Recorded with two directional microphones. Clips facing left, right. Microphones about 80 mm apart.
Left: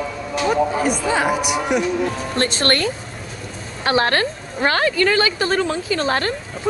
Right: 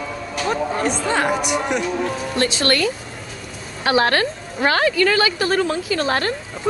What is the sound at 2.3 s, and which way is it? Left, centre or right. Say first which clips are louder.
A woman's voice: even; left.